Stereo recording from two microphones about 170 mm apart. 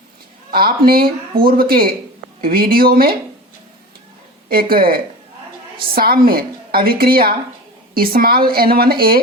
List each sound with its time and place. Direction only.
0.5 s a woman's voice: 60° right (ahead or behind)
4.4 s a woman's voice: 60° right (ahead or behind)